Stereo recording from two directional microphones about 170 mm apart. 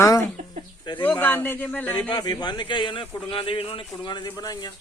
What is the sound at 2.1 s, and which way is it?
Speech, 25° left (ahead or behind).